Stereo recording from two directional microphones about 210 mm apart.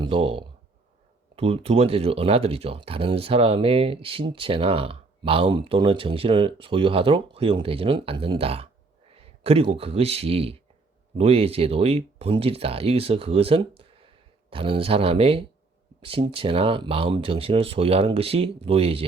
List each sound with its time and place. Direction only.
0.0 s speech: 25° right (ahead or behind)